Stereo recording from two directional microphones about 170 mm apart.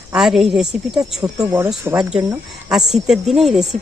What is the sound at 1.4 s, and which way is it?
Speech, 20° right (ahead or behind).